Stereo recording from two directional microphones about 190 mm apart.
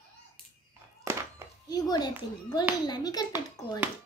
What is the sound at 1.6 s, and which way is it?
A child's voice, 20° left (ahead or behind).